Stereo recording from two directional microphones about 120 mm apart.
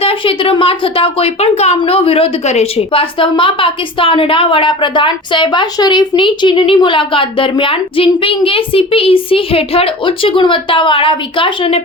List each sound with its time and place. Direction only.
0.0 s a woman's voice: 50° left (ahead or behind)